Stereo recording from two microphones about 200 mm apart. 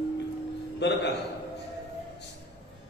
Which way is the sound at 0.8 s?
60° left (ahead or behind).